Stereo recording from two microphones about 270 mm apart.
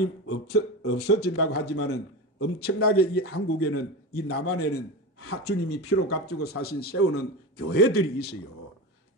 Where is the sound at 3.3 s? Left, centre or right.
Left.